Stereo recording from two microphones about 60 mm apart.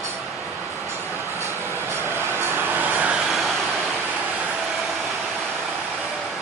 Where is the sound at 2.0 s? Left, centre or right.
Right.